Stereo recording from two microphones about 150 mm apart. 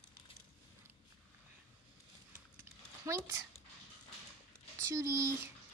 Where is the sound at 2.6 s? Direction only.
20° right (ahead or behind).